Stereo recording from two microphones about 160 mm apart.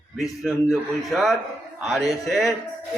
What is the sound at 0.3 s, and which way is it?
Speech, centre (ahead or behind).